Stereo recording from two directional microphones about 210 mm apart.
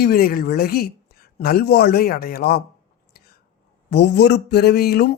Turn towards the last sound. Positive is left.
turn(degrees=50)  # may be behind; listen again after turning